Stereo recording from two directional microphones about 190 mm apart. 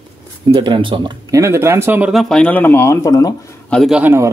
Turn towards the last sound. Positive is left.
turn(degrees=-10)  # may be behind; listen again after turning